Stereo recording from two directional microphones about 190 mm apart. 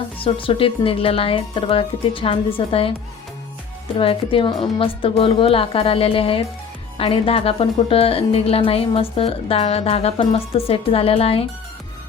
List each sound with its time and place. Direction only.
0.2 s speech: 30° left (ahead or behind)
3.9 s a woman's voice: 30° left (ahead or behind)